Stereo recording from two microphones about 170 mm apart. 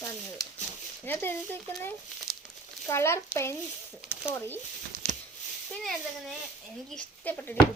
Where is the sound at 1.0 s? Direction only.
10° left (ahead or behind).